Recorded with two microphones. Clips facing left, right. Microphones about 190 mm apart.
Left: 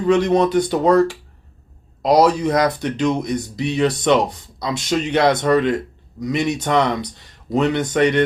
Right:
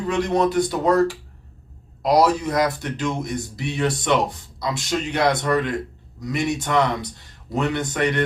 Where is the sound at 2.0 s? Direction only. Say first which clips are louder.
Left 3 dB; 20° left (ahead or behind).